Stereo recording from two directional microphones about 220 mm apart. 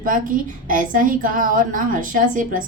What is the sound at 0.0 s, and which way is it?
Speech, 40° right (ahead or behind).